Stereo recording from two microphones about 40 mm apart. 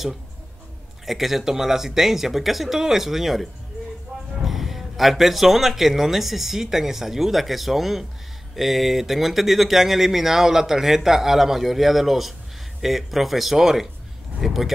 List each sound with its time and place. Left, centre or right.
1.0 s speech: centre
4.5 s speech: centre